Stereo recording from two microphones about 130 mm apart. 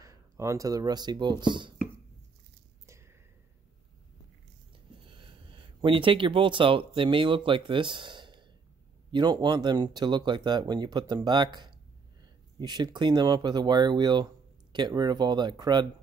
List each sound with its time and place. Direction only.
0.0 s speech: 25° right (ahead or behind)
2.9 s a sound: 20° right (ahead or behind)
5.2 s speech: 40° right (ahead or behind)